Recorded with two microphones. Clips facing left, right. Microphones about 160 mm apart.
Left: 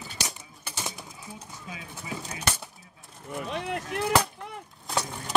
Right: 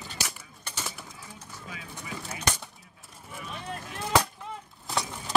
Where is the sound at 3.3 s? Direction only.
75° left (ahead or behind).